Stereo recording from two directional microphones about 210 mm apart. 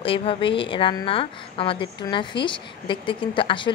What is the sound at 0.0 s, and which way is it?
A woman's voice, 25° left (ahead or behind).